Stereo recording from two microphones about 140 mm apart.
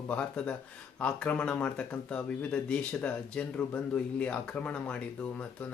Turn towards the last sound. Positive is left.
turn(degrees=10)  # may be behind; listen again after turning